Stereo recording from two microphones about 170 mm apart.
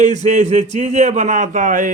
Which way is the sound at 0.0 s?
45° right (ahead or behind).